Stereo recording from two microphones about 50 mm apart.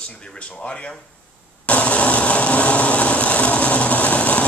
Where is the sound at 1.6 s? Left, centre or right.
Left.